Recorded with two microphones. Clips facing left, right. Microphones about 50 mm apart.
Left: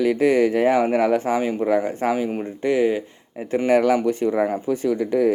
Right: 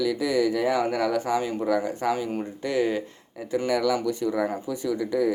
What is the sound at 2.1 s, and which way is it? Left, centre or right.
Speech, left.